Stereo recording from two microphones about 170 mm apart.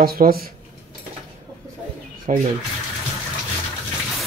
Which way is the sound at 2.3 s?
50° right (ahead or behind).